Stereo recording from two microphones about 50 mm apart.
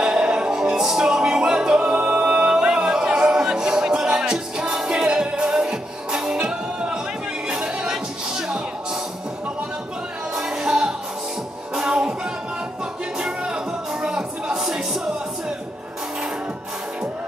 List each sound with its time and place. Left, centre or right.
0.0 s music: centre
10.3 s music: centre
13.2 s music: centre